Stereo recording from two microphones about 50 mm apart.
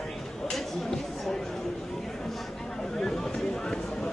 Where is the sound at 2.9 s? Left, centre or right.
Centre.